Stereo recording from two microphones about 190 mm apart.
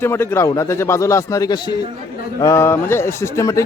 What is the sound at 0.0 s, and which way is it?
A man's voice, 10° left (ahead or behind).